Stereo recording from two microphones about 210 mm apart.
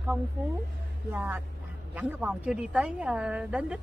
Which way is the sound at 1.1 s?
10° right (ahead or behind).